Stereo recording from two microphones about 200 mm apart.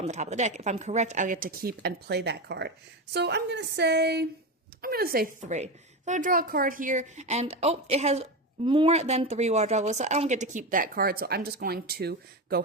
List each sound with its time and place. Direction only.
0.0 s a woman's voice: 35° right (ahead or behind); by 12.6 s 50° right (ahead or behind)